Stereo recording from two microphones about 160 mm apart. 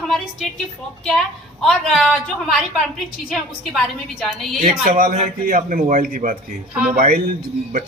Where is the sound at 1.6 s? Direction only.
Centre (ahead or behind).